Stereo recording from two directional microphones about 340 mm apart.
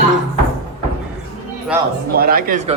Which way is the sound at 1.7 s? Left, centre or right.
Centre.